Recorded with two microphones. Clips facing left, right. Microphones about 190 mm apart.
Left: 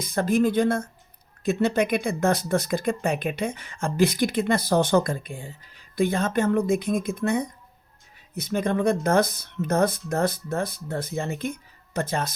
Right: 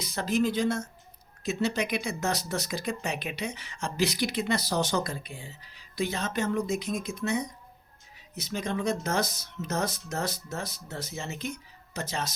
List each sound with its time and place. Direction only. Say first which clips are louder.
0.0 s speech: left 5 dB; 50° left (ahead or behind)